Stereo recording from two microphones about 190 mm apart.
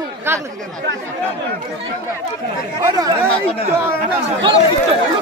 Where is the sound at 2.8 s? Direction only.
20° right (ahead or behind).